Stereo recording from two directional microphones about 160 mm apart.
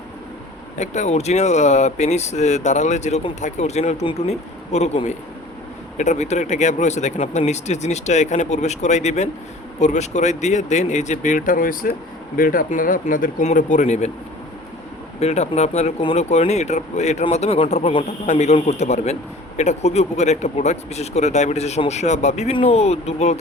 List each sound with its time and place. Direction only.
0.8 s speech: 45° left (ahead or behind)
15.2 s speech: 40° left (ahead or behind)